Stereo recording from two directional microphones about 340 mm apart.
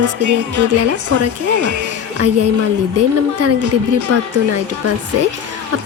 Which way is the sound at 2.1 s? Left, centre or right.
Right.